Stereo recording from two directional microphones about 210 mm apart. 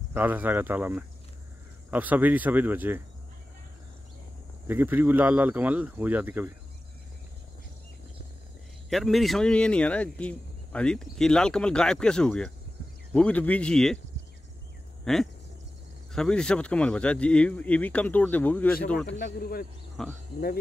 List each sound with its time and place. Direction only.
0.1 s speech: 10° right (ahead or behind)
4.6 s speech: 10° right (ahead or behind)
8.9 s speech: centre (ahead or behind)
15.1 s speech: centre (ahead or behind)
19.0 s speech: 50° left (ahead or behind)
20.0 s speech: centre (ahead or behind)